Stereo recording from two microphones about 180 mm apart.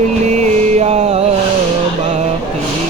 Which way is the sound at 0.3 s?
40° right (ahead or behind).